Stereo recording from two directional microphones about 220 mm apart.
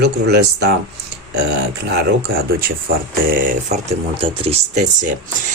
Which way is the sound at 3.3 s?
30° right (ahead or behind).